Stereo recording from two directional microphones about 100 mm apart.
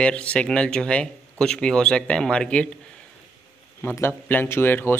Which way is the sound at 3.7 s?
25° left (ahead or behind).